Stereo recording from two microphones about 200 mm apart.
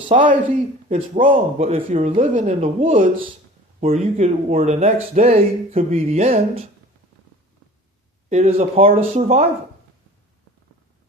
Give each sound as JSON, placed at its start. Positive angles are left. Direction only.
{"t": 0.3, "sound": "a woman's voice", "side_deg": -40}
{"t": 8.3, "sound": "speech", "side_deg": -30}